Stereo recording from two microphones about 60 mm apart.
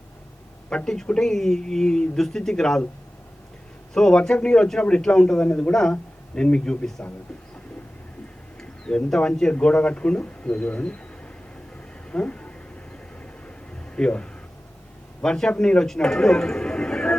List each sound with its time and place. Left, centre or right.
0.7 s speech: centre
3.9 s speech: centre
5.5 s a man's voice: left
5.7 s speech: centre
8.5 s speech: centre
12.1 s speech: left
13.9 s a man's voice: centre